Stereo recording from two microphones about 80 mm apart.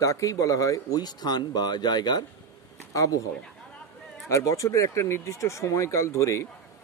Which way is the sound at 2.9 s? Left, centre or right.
Left.